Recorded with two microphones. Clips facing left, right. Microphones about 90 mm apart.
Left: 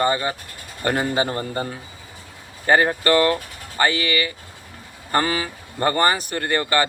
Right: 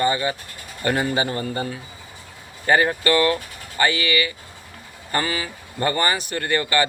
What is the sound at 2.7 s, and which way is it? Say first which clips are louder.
Speech: left 1 dB; 35° left (ahead or behind).